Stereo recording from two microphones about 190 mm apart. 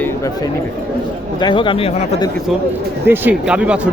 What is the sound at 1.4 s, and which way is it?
Speech, 25° left (ahead or behind).